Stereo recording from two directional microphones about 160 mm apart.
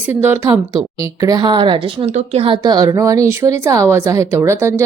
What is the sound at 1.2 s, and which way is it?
A woman's voice, 25° right (ahead or behind).